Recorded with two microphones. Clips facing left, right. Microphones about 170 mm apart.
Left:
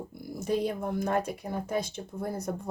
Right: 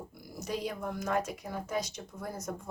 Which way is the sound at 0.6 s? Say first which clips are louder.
Left 6 dB; 30° left (ahead or behind).